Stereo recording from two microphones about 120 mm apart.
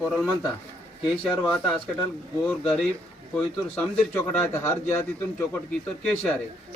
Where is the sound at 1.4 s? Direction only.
10° left (ahead or behind).